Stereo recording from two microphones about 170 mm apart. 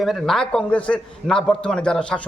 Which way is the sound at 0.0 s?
Centre (ahead or behind).